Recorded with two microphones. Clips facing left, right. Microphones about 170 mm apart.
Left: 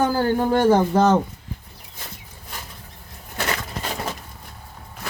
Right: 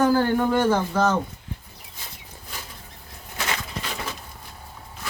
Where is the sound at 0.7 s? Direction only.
40° left (ahead or behind).